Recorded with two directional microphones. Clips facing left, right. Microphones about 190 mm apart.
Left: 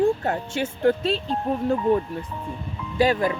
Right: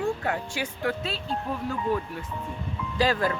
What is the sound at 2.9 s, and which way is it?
Speech, 20° left (ahead or behind).